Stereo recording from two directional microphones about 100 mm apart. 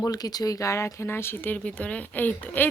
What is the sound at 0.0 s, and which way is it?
Speech, 40° left (ahead or behind).